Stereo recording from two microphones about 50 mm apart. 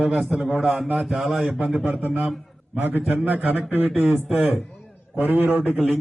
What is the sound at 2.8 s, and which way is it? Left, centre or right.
A man's voice, right.